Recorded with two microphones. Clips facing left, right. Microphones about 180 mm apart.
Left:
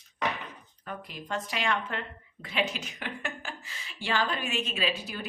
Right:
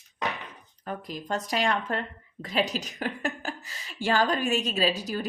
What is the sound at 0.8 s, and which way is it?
A woman's voice, 40° right (ahead or behind).